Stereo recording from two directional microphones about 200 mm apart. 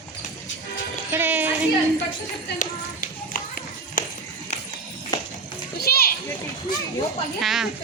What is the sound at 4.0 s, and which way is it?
Run, 40° left (ahead or behind).